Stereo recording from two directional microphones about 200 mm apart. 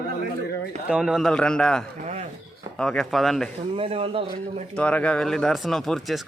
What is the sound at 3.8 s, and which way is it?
Speech, 30° right (ahead or behind).